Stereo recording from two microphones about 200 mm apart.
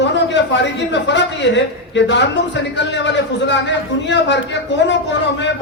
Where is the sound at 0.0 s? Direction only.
60° left (ahead or behind).